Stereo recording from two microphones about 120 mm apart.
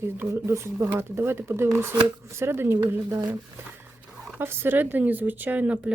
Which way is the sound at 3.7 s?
15° right (ahead or behind).